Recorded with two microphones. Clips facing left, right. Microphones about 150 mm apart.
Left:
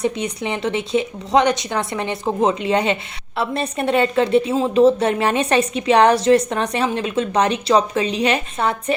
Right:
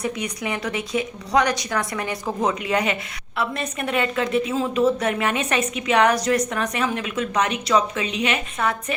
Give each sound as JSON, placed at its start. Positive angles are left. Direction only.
{"t": 0.0, "sound": "a woman's voice", "side_deg": 25}